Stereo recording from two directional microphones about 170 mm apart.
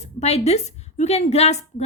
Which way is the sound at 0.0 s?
40° left (ahead or behind).